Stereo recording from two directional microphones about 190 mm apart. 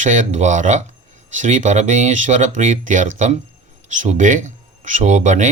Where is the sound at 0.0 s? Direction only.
40° right (ahead or behind).